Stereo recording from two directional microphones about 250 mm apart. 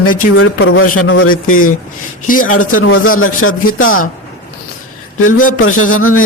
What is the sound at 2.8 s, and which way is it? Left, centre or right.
Speech, left.